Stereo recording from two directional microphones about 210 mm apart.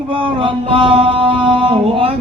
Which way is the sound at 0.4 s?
25° right (ahead or behind).